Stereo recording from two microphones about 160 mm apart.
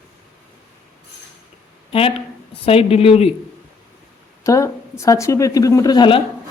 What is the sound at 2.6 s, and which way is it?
Speech, 35° left (ahead or behind).